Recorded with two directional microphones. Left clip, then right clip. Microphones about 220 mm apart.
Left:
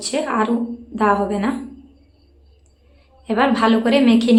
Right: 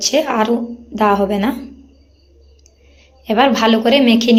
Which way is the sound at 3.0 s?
10° right (ahead or behind).